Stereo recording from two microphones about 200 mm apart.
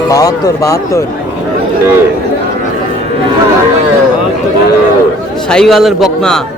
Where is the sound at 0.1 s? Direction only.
15° left (ahead or behind).